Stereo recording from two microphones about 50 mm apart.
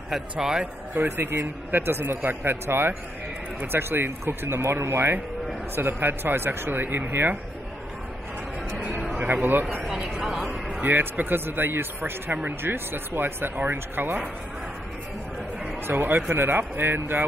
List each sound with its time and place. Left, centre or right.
0.1 s a man's voice: centre
0.9 s a man's voice: right
9.2 s speech: right
10.0 s speech: centre
10.8 s speech: right
15.9 s speech: right